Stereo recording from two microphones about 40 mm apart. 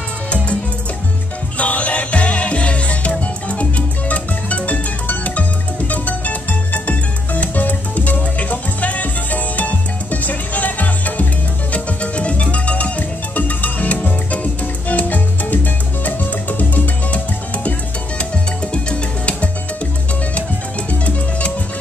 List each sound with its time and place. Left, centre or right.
1.6 s music: left
11.7 s music: left
18.7 s music: left